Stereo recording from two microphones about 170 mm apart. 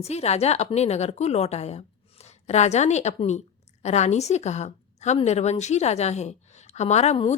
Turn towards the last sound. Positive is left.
turn(degrees=40)  # may be behind; listen again after turning